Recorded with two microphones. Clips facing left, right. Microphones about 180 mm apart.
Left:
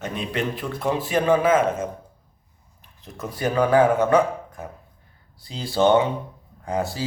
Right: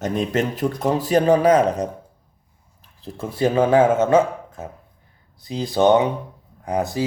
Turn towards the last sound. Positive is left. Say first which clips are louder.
# right 4 dB
turn(degrees=-20)  # may be behind; listen again after turning